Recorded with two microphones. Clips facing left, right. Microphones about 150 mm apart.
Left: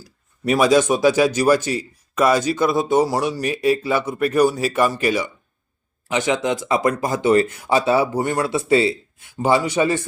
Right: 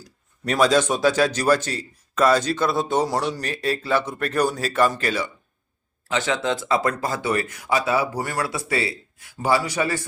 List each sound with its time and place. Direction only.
0.0 s speech: 10° left (ahead or behind)